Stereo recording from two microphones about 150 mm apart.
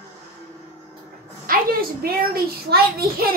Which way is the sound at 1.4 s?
70° right (ahead or behind).